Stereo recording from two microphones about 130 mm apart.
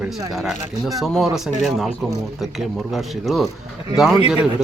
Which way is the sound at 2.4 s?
Centre (ahead or behind).